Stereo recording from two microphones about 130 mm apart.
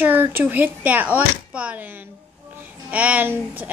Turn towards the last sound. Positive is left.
turn(degrees=-10)  # may be behind; listen again after turning